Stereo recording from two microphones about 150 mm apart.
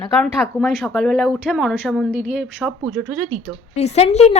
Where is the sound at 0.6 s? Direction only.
Centre (ahead or behind).